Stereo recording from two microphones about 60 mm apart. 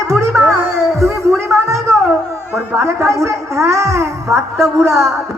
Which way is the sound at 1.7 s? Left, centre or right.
Right.